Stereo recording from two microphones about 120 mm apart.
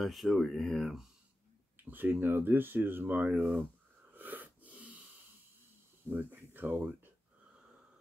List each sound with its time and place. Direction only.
0.0 s speech: centre (ahead or behind)
1.9 s speech: 15° right (ahead or behind)
4.1 s wheeze: 15° right (ahead or behind)
6.0 s speech: 15° right (ahead or behind)